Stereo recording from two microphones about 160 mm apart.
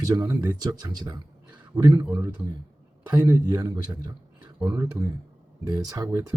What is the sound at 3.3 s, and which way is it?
A man's voice, 25° right (ahead or behind).